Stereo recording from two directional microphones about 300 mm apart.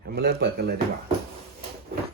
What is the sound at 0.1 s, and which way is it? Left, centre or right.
Speech, right.